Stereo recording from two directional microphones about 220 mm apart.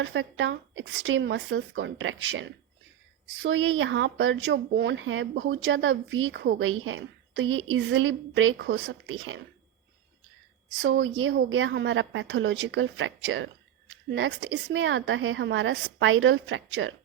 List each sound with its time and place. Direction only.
0.0 s a woman's voice: 60° right (ahead or behind)
10.8 s a woman's voice: 55° right (ahead or behind)